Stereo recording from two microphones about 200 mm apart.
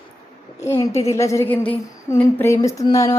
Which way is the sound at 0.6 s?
15° left (ahead or behind).